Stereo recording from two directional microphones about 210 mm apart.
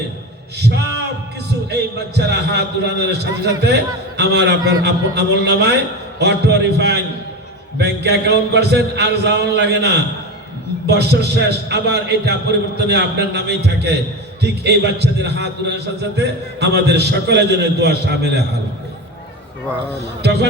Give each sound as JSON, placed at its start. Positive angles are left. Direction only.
{"t": 1.7, "sound": "a man's voice", "side_deg": -55}
{"t": 20.2, "sound": "a man's voice", "side_deg": -55}